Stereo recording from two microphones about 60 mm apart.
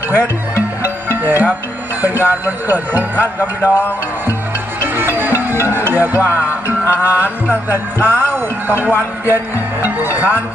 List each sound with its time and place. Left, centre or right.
0.1 s music: right
2.0 s speech: right
4.8 s music: right
10.2 s speech: right